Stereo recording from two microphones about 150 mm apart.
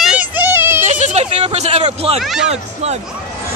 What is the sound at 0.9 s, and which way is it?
Speech, 50° right (ahead or behind).